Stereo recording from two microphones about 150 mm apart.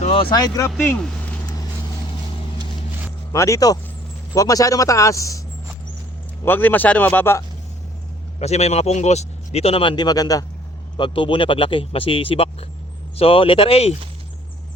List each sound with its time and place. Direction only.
0.0 s a sound: 40° left (ahead or behind)
0.3 s speech: 25° left (ahead or behind)
0.8 s speech: 10° left (ahead or behind)
3.3 s speech: 20° left (ahead or behind)
6.4 s a man's voice: 15° left (ahead or behind)
8.4 s speech: 45° left (ahead or behind)